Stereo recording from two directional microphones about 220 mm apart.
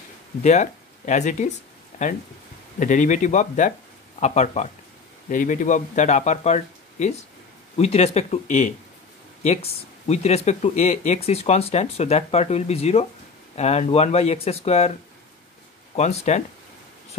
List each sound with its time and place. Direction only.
0.4 s speech: 30° left (ahead or behind)
2.8 s speech: 35° left (ahead or behind)